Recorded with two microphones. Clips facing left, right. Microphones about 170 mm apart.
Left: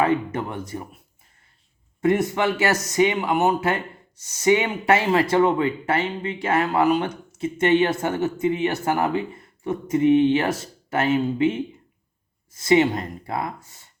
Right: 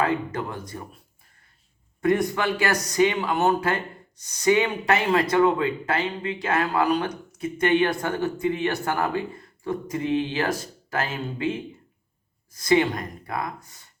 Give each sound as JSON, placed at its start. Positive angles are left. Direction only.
{"t": 0.0, "sound": "speech", "side_deg": 25}
{"t": 2.0, "sound": "speech", "side_deg": 25}